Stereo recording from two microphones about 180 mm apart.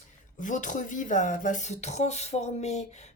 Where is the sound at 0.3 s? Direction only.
45° left (ahead or behind).